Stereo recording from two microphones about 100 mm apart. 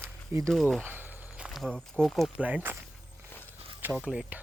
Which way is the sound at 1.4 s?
Centre (ahead or behind).